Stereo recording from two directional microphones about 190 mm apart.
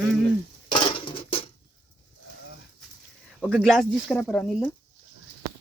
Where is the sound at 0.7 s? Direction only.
25° left (ahead or behind).